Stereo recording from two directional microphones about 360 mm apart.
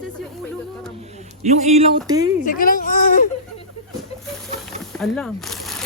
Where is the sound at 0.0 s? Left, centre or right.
Centre.